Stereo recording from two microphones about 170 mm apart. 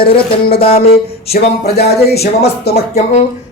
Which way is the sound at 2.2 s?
70° left (ahead or behind).